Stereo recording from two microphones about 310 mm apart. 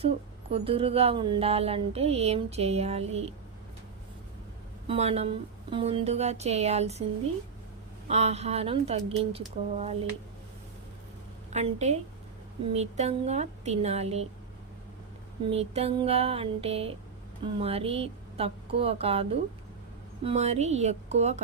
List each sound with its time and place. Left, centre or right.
0.5 s speech: centre
4.9 s speech: centre
8.0 s speech: right
11.5 s speech: right
15.4 s speech: centre